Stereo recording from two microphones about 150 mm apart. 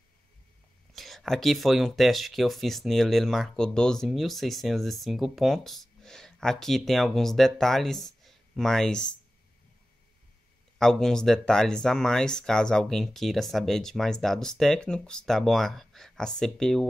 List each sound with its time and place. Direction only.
0.9 s speech: centre (ahead or behind)
10.8 s speech: 5° left (ahead or behind)